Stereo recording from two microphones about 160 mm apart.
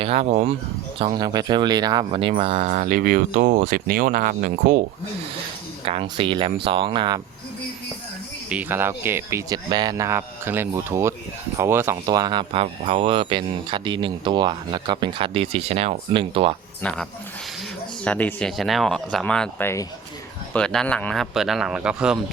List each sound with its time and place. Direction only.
0.0 s speech: 40° right (ahead or behind)
0.9 s speech: 30° right (ahead or behind); by 4.8 s 60° right (ahead or behind)
5.8 s speech: 35° right (ahead or behind)
8.4 s speech: 10° right (ahead or behind); by 16.6 s 35° right (ahead or behind)
16.8 s speech: 10° left (ahead or behind)
18.0 s speech: 10° left (ahead or behind)
20.5 s a man's voice: 5° left (ahead or behind)